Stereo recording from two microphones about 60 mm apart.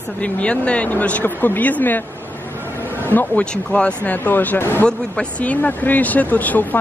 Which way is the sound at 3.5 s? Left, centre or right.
Centre.